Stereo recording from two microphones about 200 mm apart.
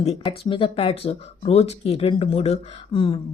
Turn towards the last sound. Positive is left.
turn(degrees=25)  # may be behind; listen again after turning